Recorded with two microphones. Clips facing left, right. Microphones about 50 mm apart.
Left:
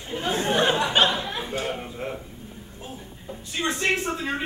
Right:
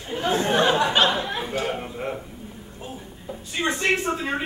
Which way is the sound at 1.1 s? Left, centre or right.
Centre.